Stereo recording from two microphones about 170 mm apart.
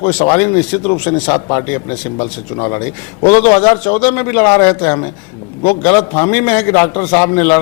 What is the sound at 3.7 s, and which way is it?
A man's voice, 15° left (ahead or behind).